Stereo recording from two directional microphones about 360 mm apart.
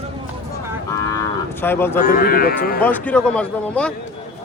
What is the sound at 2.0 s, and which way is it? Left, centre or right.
Speech, left.